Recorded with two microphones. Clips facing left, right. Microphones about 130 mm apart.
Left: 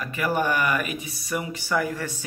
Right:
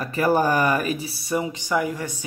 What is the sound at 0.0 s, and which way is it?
Speech, 35° right (ahead or behind).